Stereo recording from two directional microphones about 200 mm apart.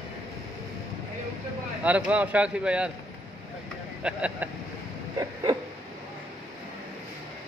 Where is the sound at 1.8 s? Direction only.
5° right (ahead or behind).